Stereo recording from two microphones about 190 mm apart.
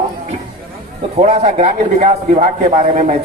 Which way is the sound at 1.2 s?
35° right (ahead or behind).